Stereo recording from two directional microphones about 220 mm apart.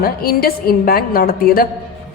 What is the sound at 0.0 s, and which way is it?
A woman's voice, 45° left (ahead or behind).